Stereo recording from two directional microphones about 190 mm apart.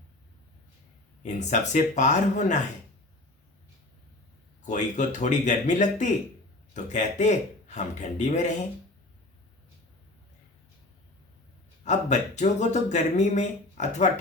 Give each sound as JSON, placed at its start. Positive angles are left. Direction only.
{"t": 1.2, "sound": "speech", "side_deg": 40}
{"t": 4.6, "sound": "speech", "side_deg": 40}
{"t": 11.9, "sound": "speech", "side_deg": 40}